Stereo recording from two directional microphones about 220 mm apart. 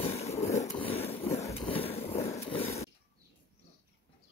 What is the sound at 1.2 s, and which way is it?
Vehicle, 10° left (ahead or behind).